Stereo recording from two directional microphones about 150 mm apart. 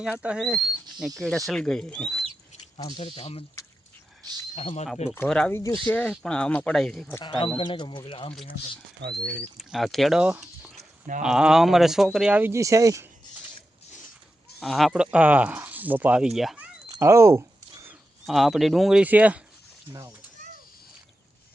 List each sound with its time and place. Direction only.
0.0 s speech: 5° right (ahead or behind)
3.0 s speech: 40° left (ahead or behind)
4.5 s speech: 45° left (ahead or behind)
5.1 s speech: 10° left (ahead or behind)
6.0 s speech: 10° left (ahead or behind)
7.3 s speech: 35° left (ahead or behind)
9.0 s speech: 90° right
9.6 s speech: centre (ahead or behind); by 13.1 s 20° right (ahead or behind)
14.6 s speech: centre (ahead or behind)
16.9 s a sound: 20° right (ahead or behind)
18.3 s speech: centre (ahead or behind)
19.9 s speech: 20° right (ahead or behind)